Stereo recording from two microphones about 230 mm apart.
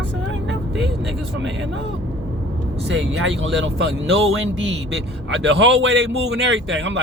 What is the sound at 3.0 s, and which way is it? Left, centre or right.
A man's voice, right.